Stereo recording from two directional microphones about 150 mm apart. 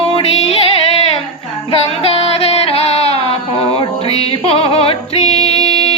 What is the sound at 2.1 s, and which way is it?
Music, 40° left (ahead or behind).